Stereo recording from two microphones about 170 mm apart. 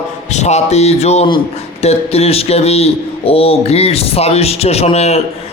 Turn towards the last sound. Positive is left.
turn(degrees=40)  # may be behind; listen again after turning